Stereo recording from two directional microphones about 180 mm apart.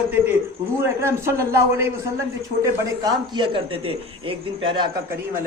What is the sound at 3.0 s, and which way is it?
Speech, 25° right (ahead or behind).